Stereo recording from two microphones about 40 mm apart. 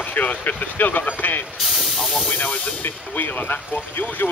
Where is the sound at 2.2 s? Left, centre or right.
Left.